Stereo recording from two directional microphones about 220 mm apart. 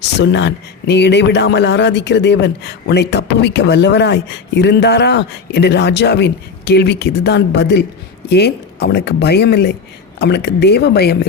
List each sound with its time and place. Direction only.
0.0 s speech: 50° left (ahead or behind)